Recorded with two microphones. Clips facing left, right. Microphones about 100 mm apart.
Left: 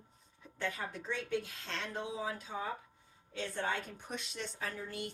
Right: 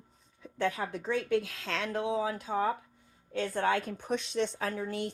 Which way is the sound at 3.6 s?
90° right.